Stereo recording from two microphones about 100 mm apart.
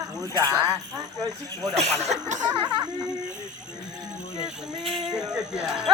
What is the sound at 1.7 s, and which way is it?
Speech, 90° right.